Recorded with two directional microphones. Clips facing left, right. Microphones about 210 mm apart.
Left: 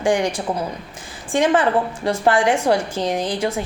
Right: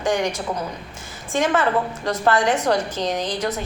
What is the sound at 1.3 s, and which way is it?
Speech, 30° left (ahead or behind).